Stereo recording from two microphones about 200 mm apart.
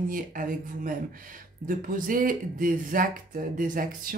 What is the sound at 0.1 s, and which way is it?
Speech, 45° right (ahead or behind).